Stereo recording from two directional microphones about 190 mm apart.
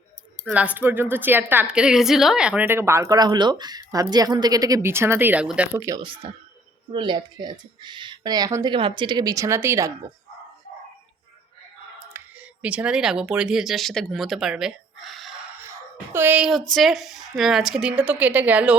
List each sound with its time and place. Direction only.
0.4 s a woman's voice: 5° right (ahead or behind)
12.1 s speech: 5° right (ahead or behind)
16.1 s a woman's voice: 10° right (ahead or behind)